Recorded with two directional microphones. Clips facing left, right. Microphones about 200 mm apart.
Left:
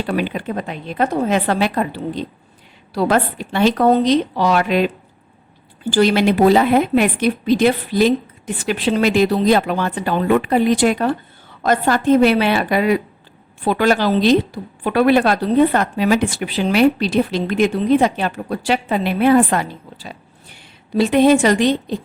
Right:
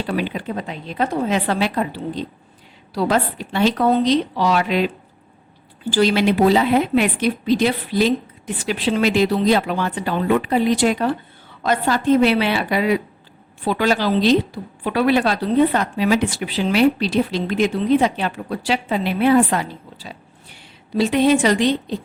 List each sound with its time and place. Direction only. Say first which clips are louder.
0.1 s a woman's voice: left 3 dB; 55° left (ahead or behind)
2.9 s a woman's voice: left 2 dB; 55° left (ahead or behind)
6.0 s a woman's voice: left 2 dB; 50° left (ahead or behind)